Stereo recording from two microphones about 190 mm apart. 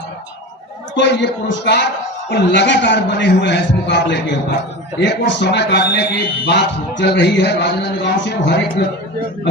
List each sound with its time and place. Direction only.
0.9 s a man's voice: 65° left (ahead or behind)